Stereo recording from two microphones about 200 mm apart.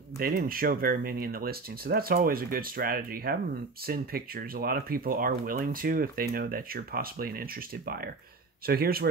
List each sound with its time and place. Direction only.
0.2 s speech: 50° right (ahead or behind)